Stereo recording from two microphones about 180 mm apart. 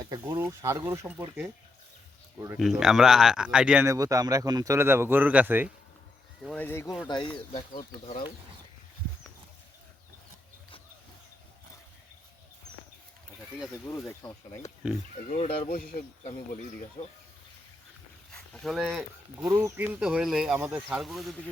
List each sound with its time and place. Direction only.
0.0 s speech: 20° right (ahead or behind)
2.6 s speech: centre (ahead or behind)
3.8 s speech: 20° right (ahead or behind)
6.4 s speech: 5° left (ahead or behind)
7.1 s speech: 25° left (ahead or behind)
13.9 s speech: 20° left (ahead or behind)
14.8 s speech: 10° right (ahead or behind)
15.3 s speech: 40° left (ahead or behind)
15.6 s speech: 50° left (ahead or behind)
18.3 s speech: centre (ahead or behind)
19.5 s speech: 15° right (ahead or behind)